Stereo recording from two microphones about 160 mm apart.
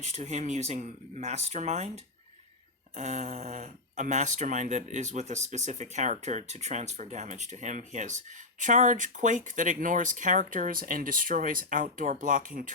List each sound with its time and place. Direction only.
0.0 s speech: 45° right (ahead or behind)
2.9 s speech: 45° right (ahead or behind)